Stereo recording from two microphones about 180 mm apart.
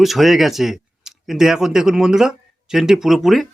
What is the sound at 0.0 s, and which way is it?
Speech, centre (ahead or behind).